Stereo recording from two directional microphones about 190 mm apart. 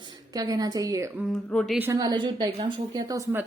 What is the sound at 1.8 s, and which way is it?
A woman's voice, 15° right (ahead or behind).